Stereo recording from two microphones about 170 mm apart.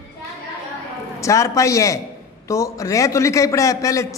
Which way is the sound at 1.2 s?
20° left (ahead or behind).